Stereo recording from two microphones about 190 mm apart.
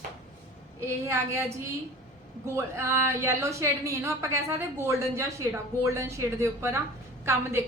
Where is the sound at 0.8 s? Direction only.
15° right (ahead or behind).